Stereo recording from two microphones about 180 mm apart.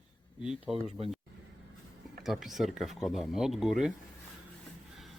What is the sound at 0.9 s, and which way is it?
Speech, 35° right (ahead or behind).